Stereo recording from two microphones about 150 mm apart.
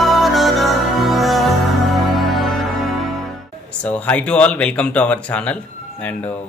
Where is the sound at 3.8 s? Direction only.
10° left (ahead or behind).